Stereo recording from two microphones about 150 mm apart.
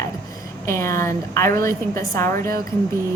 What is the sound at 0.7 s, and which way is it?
A woman's voice, 20° left (ahead or behind).